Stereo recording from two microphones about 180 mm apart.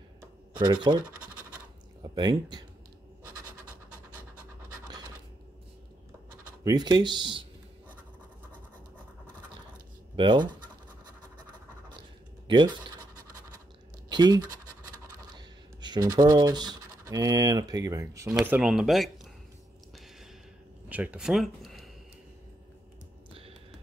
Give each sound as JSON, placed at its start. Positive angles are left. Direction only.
{"t": 0.7, "sound": "speech", "side_deg": -25}
{"t": 2.1, "sound": "speech", "side_deg": -20}
{"t": 4.8, "sound": "scratch", "side_deg": -20}
{"t": 6.6, "sound": "speech", "side_deg": -20}
{"t": 10.1, "sound": "speech", "side_deg": -25}
{"t": 12.4, "sound": "speech", "side_deg": -25}
{"t": 14.0, "sound": "scratch", "side_deg": -25}
{"t": 15.3, "sound": "a sound", "side_deg": -25}
{"t": 16.2, "sound": "speech", "side_deg": -20}
{"t": 20.9, "sound": "speech", "side_deg": -5}